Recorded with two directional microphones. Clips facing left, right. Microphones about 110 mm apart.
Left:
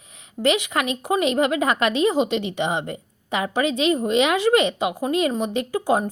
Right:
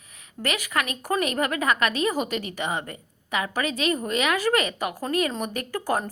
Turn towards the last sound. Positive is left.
turn(degrees=20)  # may be behind; listen again after turning